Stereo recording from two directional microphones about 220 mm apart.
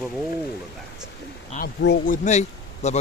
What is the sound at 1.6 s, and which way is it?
Speech, 35° left (ahead or behind).